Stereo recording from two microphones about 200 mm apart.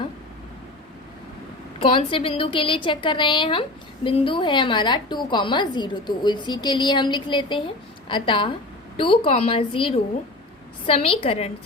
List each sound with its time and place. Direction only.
1.8 s a woman's voice: 25° left (ahead or behind)